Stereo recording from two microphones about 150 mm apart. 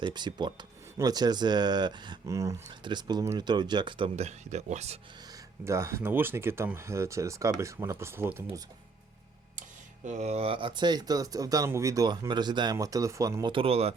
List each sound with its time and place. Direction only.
0.0 s speech: 30° right (ahead or behind)
4.1 s speech: 50° right (ahead or behind)
5.6 s speech: 20° right (ahead or behind)
9.6 s speech: 55° right (ahead or behind); by 13.5 s 20° right (ahead or behind)
13.5 s speech: 40° right (ahead or behind)